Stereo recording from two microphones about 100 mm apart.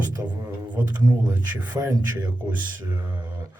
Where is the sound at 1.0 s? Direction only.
40° right (ahead or behind).